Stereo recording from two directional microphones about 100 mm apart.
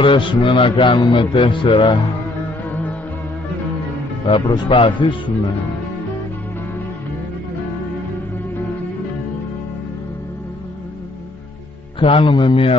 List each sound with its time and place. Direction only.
0.0 s mantra: 60° left (ahead or behind)
4.3 s mantra: 55° left (ahead or behind)
12.0 s mantra: 55° left (ahead or behind)